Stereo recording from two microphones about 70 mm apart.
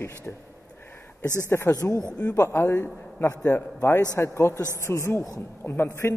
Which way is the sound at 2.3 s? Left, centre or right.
Left.